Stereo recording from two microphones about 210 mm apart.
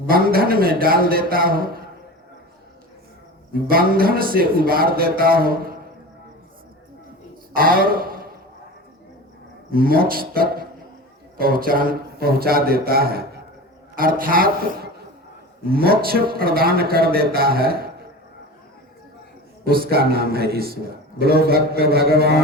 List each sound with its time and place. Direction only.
0.0 s a man's voice: 45° right (ahead or behind)
3.5 s a man's voice: 45° right (ahead or behind)
7.5 s a man's voice: 45° right (ahead or behind)
9.7 s a man's voice: 45° right (ahead or behind)
19.6 s a man's voice: 45° right (ahead or behind)